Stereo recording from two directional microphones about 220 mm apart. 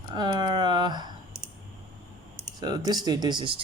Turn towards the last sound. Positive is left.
turn(degrees=-20)  # may be behind; listen again after turning